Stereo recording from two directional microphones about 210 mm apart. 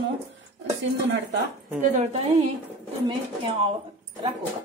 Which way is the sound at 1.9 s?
35° right (ahead or behind).